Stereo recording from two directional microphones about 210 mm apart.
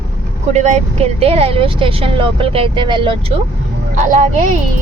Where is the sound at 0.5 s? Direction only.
35° right (ahead or behind).